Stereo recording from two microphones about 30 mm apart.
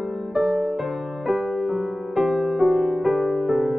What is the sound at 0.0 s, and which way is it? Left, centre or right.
Music, centre.